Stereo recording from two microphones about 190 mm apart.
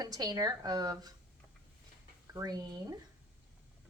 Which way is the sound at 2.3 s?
20° right (ahead or behind).